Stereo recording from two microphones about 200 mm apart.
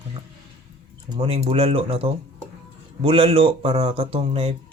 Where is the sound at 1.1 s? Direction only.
25° right (ahead or behind).